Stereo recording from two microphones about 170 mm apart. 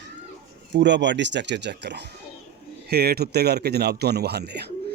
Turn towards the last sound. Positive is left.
turn(degrees=-75)  # may be behind; listen again after turning